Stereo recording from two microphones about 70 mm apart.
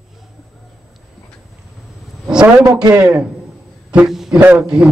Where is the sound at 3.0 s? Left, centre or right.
Centre.